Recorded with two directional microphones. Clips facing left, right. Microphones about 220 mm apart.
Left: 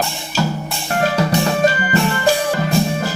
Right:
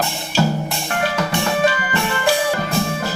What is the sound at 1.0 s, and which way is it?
Music, 40° left (ahead or behind).